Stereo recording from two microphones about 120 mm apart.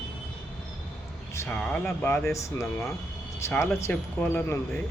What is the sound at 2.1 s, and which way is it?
Speech, 25° left (ahead or behind).